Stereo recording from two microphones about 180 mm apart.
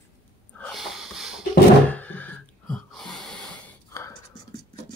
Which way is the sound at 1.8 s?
10° left (ahead or behind).